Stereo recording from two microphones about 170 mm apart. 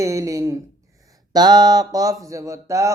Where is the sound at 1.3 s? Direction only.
25° right (ahead or behind).